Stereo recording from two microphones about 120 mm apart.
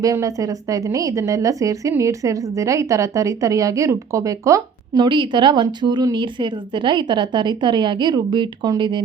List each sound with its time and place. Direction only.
0.0 s a woman's voice: 25° right (ahead or behind)
4.9 s a woman's voice: 40° right (ahead or behind)